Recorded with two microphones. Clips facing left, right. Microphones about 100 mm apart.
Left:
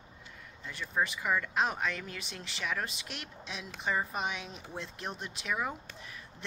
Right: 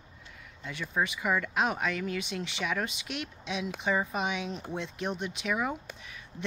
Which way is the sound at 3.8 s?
5° right (ahead or behind).